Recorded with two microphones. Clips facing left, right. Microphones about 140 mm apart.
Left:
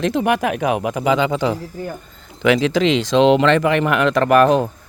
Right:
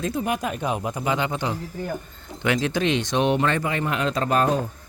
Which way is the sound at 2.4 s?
90° left.